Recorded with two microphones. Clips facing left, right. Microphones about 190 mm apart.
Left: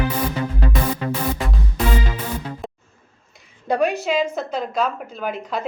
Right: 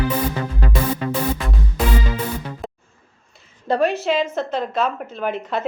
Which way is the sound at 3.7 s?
10° left (ahead or behind).